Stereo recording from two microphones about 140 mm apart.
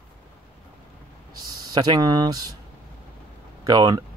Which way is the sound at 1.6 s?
30° right (ahead or behind).